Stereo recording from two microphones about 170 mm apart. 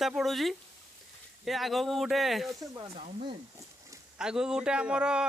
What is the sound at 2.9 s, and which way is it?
Speech, 40° right (ahead or behind).